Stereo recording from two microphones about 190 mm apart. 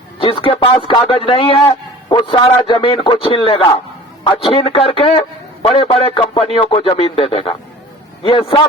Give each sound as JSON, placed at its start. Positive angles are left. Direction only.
{"t": 0.2, "sound": "a man's voice", "side_deg": 30}